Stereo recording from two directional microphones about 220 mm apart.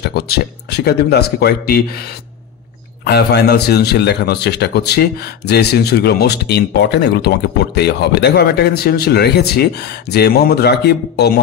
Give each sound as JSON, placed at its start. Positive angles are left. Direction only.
{"t": 0.0, "sound": "a man's voice", "side_deg": 45}
{"t": 3.1, "sound": "a man's voice", "side_deg": 50}